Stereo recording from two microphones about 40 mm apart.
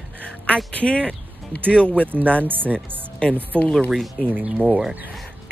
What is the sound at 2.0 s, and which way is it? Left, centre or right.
Speech, left.